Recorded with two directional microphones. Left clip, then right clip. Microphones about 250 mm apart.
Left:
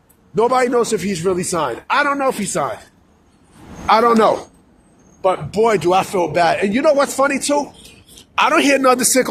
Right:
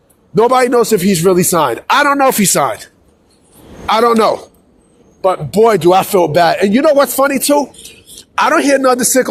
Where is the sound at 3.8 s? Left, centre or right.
Right.